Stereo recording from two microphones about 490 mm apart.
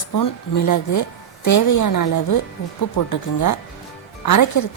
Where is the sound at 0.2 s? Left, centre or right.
Left.